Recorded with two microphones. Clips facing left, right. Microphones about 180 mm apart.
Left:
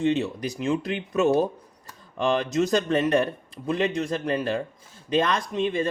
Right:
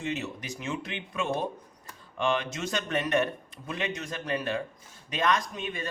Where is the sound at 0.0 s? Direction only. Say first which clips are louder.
Left 10 dB; 30° left (ahead or behind).